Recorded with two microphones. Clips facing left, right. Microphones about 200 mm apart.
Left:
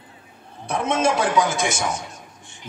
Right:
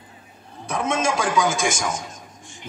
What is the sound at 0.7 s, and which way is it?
A man's voice, 60° left (ahead or behind).